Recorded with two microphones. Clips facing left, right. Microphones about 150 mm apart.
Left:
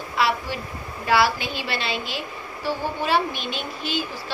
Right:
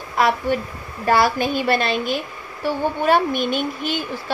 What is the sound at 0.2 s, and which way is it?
A woman's voice, 45° right (ahead or behind).